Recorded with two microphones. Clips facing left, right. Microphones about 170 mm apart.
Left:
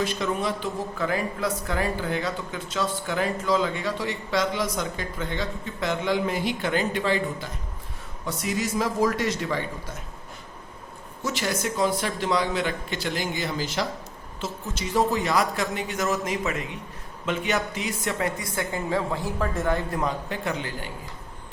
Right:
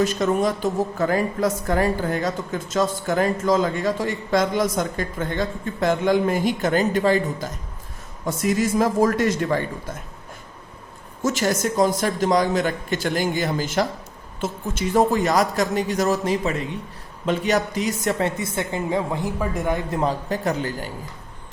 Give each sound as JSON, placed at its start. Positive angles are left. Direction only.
{"t": 0.0, "sound": "a woman's voice", "side_deg": -45}
{"t": 11.2, "sound": "a woman's voice", "side_deg": -45}
{"t": 18.3, "sound": "a woman's voice", "side_deg": -25}
{"t": 20.0, "sound": "speech", "side_deg": -35}